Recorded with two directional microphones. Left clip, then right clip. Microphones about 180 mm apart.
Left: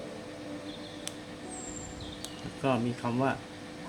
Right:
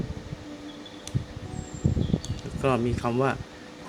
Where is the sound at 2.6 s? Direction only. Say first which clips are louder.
Right 5 dB; 40° right (ahead or behind).